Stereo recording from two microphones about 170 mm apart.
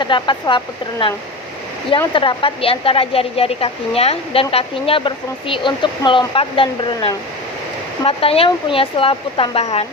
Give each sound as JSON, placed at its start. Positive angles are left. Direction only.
{"t": 0.0, "sound": "speech", "side_deg": 25}
{"t": 2.1, "sound": "a woman's voice", "side_deg": 30}